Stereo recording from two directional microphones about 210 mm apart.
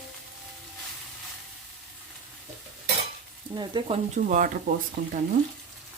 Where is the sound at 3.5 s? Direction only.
20° right (ahead or behind).